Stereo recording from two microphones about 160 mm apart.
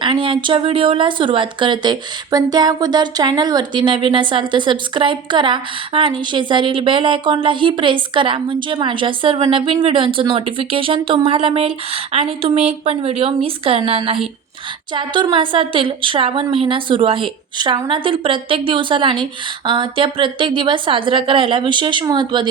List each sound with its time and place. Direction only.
0.0 s speech: 30° right (ahead or behind)